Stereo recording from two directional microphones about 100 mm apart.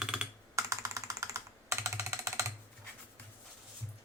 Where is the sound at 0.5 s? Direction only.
30° right (ahead or behind).